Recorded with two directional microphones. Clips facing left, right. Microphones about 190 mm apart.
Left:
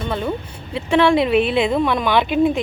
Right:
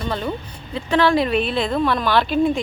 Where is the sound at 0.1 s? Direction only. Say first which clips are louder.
Left 2 dB; 5° left (ahead or behind).